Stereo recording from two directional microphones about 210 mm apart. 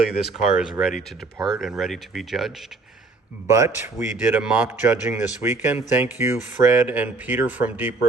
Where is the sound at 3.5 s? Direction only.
15° right (ahead or behind).